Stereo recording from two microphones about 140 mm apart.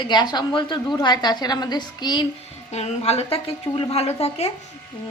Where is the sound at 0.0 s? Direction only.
30° left (ahead or behind).